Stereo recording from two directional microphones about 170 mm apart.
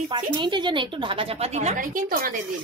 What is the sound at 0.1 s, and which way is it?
Speech, 25° right (ahead or behind).